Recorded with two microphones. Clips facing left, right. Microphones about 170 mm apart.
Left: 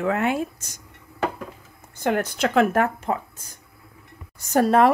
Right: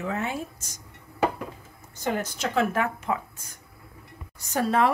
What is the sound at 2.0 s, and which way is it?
Speech, 65° left (ahead or behind).